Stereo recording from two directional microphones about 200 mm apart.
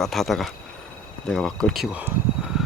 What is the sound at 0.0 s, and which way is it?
Speech, centre (ahead or behind).